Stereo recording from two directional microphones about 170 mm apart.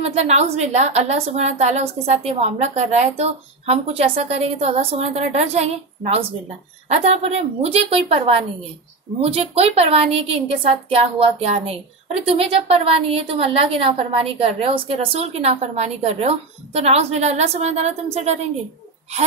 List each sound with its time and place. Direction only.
0.0 s a woman's voice: 40° right (ahead or behind)